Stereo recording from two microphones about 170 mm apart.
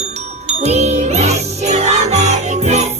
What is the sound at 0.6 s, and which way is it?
Music, 40° right (ahead or behind).